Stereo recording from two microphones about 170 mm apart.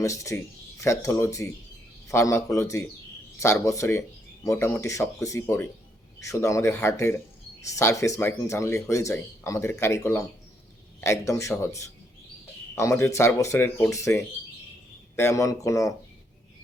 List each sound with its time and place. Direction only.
0.0 s speech: 20° left (ahead or behind)